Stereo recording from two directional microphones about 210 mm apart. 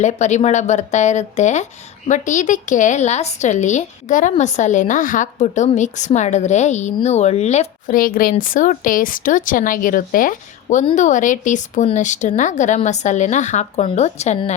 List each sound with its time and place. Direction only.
0.0 s speech: 35° left (ahead or behind)